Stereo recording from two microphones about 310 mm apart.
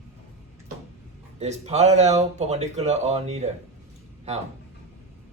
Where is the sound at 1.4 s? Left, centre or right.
Right.